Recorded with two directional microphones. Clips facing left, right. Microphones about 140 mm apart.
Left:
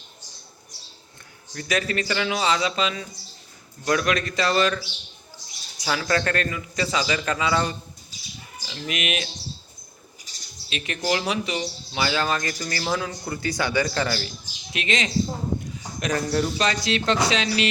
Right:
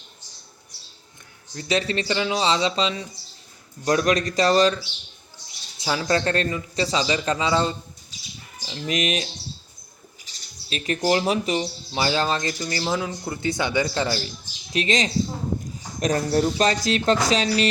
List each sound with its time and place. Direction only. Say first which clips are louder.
1.5 s a man's voice: right 1 dB; 30° right (ahead or behind)
5.8 s a man's voice: right 2 dB; 25° right (ahead or behind)
8.6 s speech: right 4 dB; 35° right (ahead or behind)
10.7 s speech: right 4 dB; 40° right (ahead or behind)
11.6 s a man's voice: right 2 dB; 30° right (ahead or behind)
12.5 s a man's voice: right 1 dB; 15° right (ahead or behind)
14.7 s speech: right 3 dB; 35° right (ahead or behind)